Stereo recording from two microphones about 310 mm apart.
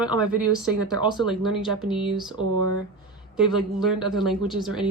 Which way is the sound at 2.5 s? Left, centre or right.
Right.